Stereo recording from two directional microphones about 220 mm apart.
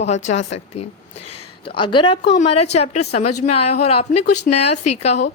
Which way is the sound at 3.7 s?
30° left (ahead or behind).